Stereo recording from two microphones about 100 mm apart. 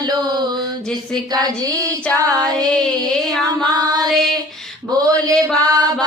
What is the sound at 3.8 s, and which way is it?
Female singing, 40° right (ahead or behind).